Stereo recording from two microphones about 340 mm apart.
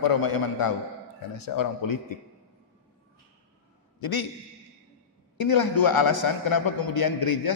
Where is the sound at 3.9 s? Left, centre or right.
Left.